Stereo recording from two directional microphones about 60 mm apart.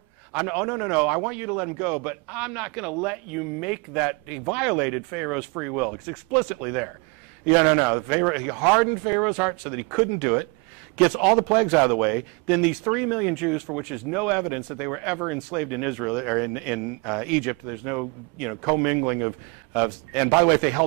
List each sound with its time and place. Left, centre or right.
0.3 s speech: centre